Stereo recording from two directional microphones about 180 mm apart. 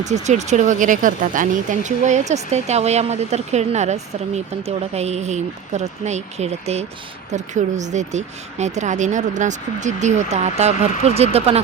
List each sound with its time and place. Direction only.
0.0 s speech: 40° right (ahead or behind)